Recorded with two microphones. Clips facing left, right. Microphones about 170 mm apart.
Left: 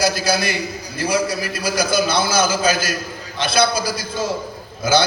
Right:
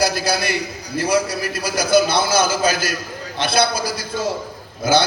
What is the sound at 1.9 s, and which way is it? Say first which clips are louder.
A man's voice: right 6 dB; 60° right (ahead or behind).